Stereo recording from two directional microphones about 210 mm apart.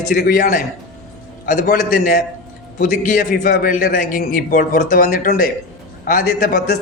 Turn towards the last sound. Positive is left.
turn(degrees=45)  # may be behind; listen again after turning